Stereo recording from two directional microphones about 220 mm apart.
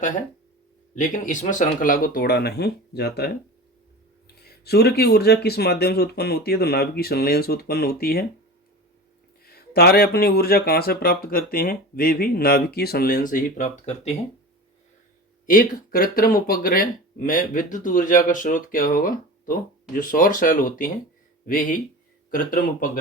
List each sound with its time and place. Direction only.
0.9 s speech: 35° left (ahead or behind)
4.4 s speech: 45° left (ahead or behind)
9.4 s speech: 45° left (ahead or behind)
15.4 s speech: 40° left (ahead or behind)